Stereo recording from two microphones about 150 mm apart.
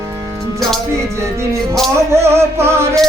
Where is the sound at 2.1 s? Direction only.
15° right (ahead or behind).